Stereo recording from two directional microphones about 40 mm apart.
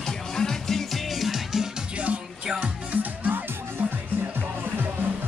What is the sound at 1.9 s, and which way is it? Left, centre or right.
Music, right.